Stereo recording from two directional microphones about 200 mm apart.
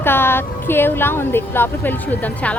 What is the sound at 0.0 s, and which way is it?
A woman's voice, 10° left (ahead or behind).